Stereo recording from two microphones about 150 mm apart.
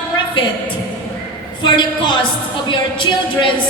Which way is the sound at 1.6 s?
30° left (ahead or behind).